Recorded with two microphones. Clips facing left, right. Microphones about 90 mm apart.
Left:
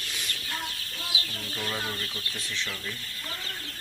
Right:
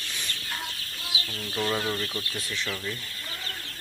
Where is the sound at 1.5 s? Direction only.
15° right (ahead or behind).